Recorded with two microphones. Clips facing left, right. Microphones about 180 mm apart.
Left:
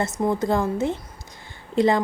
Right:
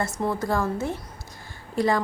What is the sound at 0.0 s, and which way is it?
A woman's voice, 20° left (ahead or behind).